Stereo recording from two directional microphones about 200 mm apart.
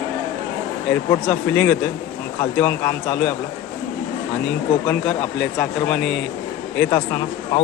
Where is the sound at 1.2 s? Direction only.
5° left (ahead or behind).